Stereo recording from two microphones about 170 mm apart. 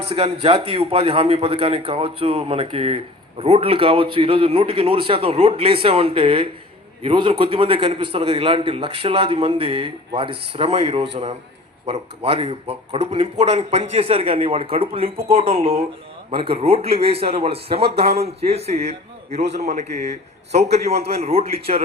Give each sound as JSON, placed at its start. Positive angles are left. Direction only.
{"t": 0.0, "sound": "a man's voice", "side_deg": -35}